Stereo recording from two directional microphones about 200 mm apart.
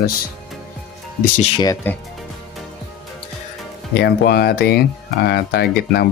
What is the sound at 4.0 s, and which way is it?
Speech, 55° left (ahead or behind).